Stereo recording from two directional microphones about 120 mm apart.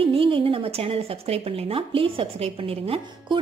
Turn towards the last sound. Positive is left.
turn(degrees=-50)  # may be behind; listen again after turning